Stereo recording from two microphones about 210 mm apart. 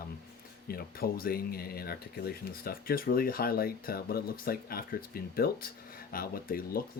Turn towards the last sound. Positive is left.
turn(degrees=45)  # may be behind; listen again after turning